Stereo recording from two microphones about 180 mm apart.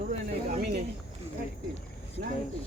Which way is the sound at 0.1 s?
60° right (ahead or behind).